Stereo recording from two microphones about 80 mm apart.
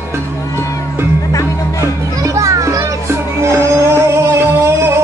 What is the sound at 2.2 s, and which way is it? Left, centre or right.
Children playing, right.